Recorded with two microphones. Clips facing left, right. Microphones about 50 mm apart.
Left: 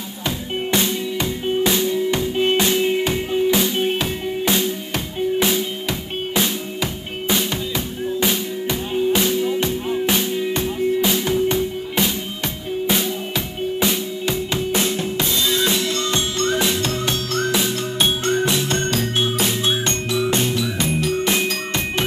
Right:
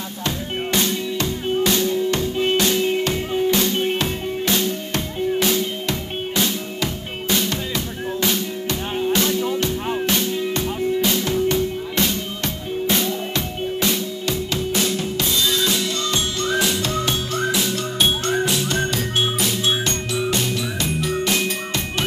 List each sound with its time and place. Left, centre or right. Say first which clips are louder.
0.7 s music: left 1 dB; centre
12.8 s music: even; centre
13.7 s drum kit: left 1 dB; centre
18.2 s music: left 1 dB; left